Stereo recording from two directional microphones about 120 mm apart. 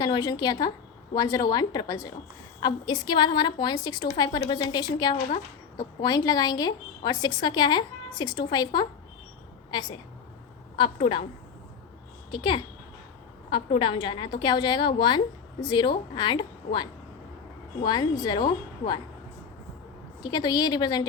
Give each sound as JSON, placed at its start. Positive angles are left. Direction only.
{"t": 0.0, "sound": "a woman's voice", "side_deg": 35}
{"t": 12.3, "sound": "a woman's voice", "side_deg": 45}
{"t": 20.2, "sound": "a woman's voice", "side_deg": 35}